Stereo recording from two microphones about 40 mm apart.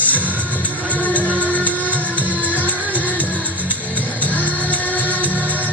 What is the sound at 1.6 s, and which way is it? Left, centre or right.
Music, left.